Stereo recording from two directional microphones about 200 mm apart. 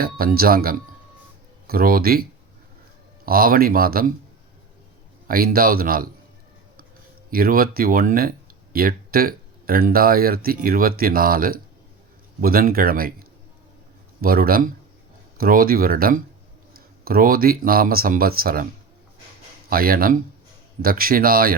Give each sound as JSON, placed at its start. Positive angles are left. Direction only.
{"t": 0.0, "sound": "speech", "side_deg": -45}
{"t": 3.2, "sound": "speech", "side_deg": -45}
{"t": 5.3, "sound": "speech", "side_deg": -45}
{"t": 7.3, "sound": "speech", "side_deg": -45}
{"t": 19.7, "sound": "speech", "side_deg": -45}